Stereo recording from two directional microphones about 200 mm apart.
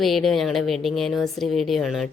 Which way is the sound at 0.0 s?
Centre (ahead or behind).